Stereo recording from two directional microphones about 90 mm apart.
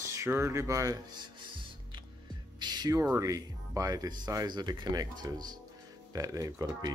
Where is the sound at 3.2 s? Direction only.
40° right (ahead or behind).